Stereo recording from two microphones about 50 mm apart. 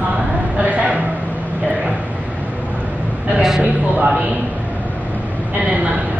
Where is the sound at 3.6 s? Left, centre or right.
Right.